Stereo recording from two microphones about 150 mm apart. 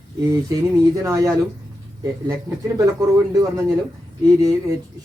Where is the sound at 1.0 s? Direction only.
20° right (ahead or behind).